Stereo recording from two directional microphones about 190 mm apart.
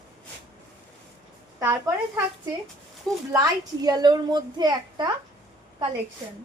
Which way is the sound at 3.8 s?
20° right (ahead or behind).